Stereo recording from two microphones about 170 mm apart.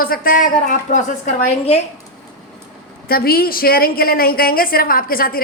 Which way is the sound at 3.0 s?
60° left (ahead or behind).